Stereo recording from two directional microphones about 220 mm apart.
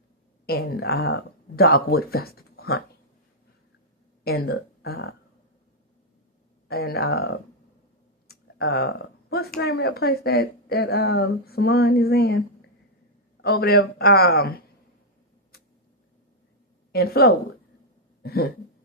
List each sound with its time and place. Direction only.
0.4 s speech: 45° left (ahead or behind)
4.2 s speech: 45° left (ahead or behind)
6.7 s speech: 45° left (ahead or behind)
8.3 s a sound: 45° left (ahead or behind)
8.7 s speech: 45° left (ahead or behind)
13.4 s speech: 45° left (ahead or behind)
16.9 s speech: 45° left (ahead or behind)
18.2 s a sound: 45° left (ahead or behind)